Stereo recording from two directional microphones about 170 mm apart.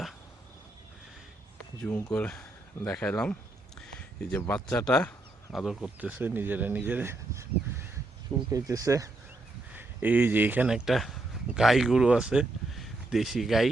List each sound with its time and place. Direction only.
1.8 s speech: 10° left (ahead or behind)
3.8 s a sound: 5° left (ahead or behind)
4.5 s speech: 5° left (ahead or behind)